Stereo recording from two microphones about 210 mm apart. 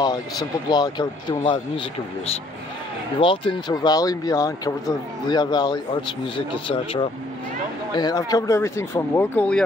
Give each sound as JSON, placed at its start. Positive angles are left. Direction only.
{"t": 0.0, "sound": "speech", "side_deg": 20}
{"t": 3.2, "sound": "speech", "side_deg": 25}